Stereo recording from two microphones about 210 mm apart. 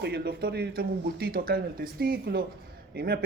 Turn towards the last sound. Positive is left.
turn(degrees=-45)  # may be behind; listen again after turning